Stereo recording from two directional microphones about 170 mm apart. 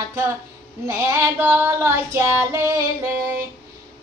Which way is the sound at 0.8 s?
15° right (ahead or behind).